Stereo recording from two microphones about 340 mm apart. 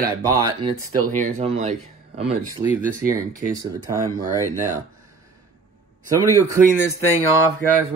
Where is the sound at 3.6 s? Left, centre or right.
Centre.